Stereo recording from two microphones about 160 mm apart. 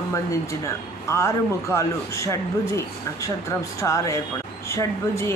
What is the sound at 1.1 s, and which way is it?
A man's voice, 15° left (ahead or behind).